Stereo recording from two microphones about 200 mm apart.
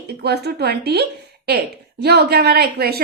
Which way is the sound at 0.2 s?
55° right (ahead or behind).